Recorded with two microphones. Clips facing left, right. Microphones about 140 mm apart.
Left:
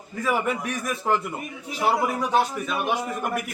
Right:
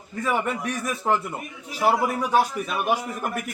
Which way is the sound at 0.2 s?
Centre (ahead or behind).